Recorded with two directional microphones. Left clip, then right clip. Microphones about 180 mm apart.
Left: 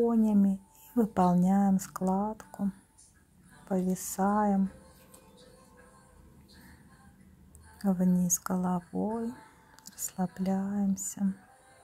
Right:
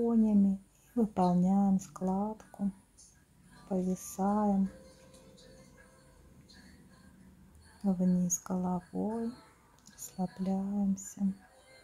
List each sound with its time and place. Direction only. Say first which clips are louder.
0.0 s speech: left 3 dB; 20° left (ahead or behind)
3.6 s speech: left 3 dB; 15° left (ahead or behind)
8.1 s speech: left 3 dB; 15° left (ahead or behind)
8.9 s speech: left 3 dB; 25° left (ahead or behind)
9.8 s whispering: left 8 dB; 15° left (ahead or behind)
10.2 s speech: left 3 dB; 15° left (ahead or behind)